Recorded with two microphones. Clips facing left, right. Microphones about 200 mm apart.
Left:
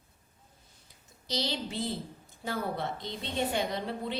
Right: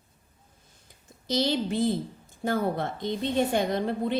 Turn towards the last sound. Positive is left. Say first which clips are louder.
# right 7 dB
turn(degrees=-50)  # may be behind; listen again after turning